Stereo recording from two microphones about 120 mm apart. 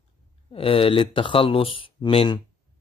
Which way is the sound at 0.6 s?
50° left (ahead or behind).